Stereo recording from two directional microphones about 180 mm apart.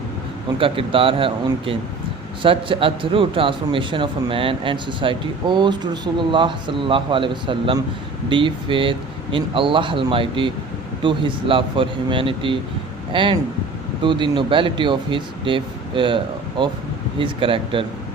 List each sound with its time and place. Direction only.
0.6 s a man's voice: 30° right (ahead or behind)